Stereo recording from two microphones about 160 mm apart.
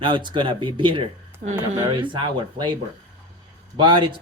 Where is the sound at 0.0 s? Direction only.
30° right (ahead or behind).